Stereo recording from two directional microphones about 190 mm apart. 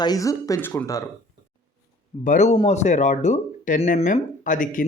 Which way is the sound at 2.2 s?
40° left (ahead or behind).